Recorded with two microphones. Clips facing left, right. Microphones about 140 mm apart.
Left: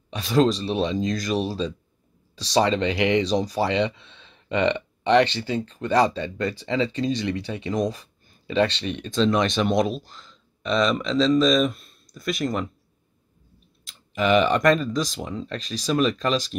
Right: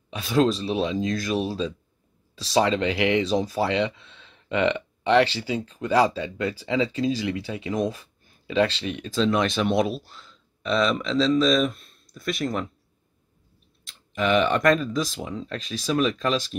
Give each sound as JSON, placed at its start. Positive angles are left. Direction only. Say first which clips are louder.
{"t": 0.1, "sound": "speech", "louder": "left 1 dB", "side_deg": -5}
{"t": 13.8, "sound": "speech", "louder": "left 2 dB", "side_deg": 0}